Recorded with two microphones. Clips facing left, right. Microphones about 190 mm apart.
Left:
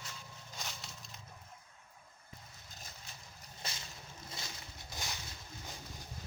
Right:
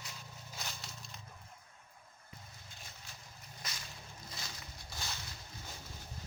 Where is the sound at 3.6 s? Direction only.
30° left (ahead or behind).